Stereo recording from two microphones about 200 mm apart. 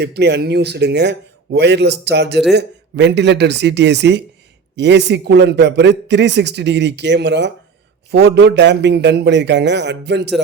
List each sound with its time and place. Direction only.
0.0 s a man's voice: 55° right (ahead or behind)